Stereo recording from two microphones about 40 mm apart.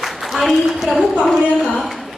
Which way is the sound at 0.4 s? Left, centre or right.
Centre.